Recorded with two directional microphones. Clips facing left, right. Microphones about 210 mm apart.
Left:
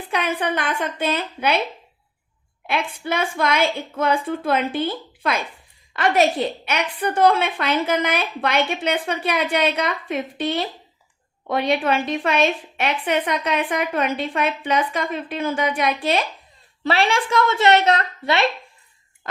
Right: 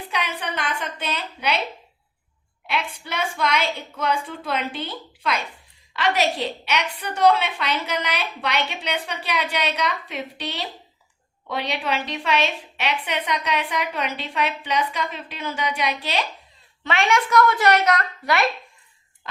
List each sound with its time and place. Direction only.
0.1 s a woman's voice: 50° left (ahead or behind)
2.6 s a woman's voice: 50° left (ahead or behind)
16.8 s a woman's voice: 35° left (ahead or behind)